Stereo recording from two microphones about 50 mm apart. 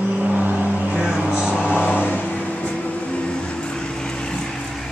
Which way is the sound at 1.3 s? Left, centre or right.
Centre.